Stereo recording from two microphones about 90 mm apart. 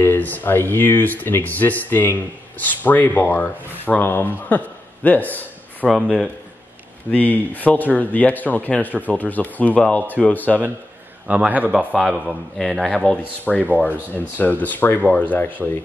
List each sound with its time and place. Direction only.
0.0 s a man's voice: 25° left (ahead or behind)
5.9 s a man's voice: 10° right (ahead or behind)
7.1 s speech: 20° left (ahead or behind)
11.2 s a man's voice: 15° right (ahead or behind)
12.0 s a man's voice: 5° right (ahead or behind)
14.1 s speech: 20° left (ahead or behind)